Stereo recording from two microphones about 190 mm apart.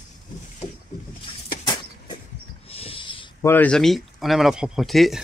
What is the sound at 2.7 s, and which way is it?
Owl, 30° left (ahead or behind).